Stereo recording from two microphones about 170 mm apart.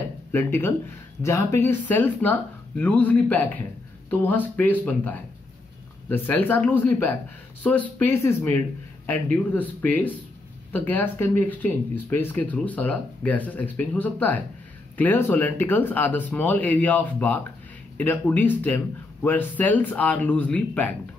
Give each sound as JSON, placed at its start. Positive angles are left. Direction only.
{"t": 0.3, "sound": "speech", "side_deg": 10}